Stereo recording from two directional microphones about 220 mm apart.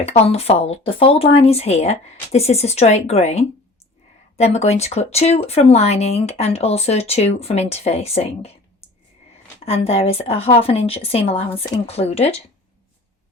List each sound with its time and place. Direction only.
0.0 s speech: 25° left (ahead or behind)
9.6 s speech: 25° left (ahead or behind)